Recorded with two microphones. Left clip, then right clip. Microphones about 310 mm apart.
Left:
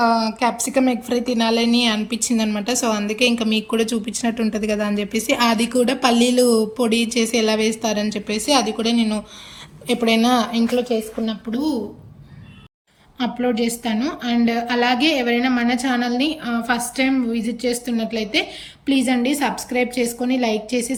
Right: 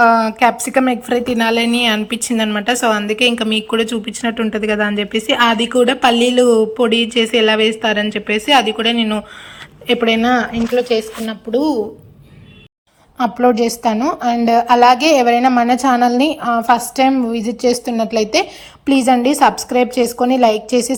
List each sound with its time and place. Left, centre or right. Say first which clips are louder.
0.0 s a woman's voice: right 7 dB; centre
13.1 s a woman's voice: right 8 dB; centre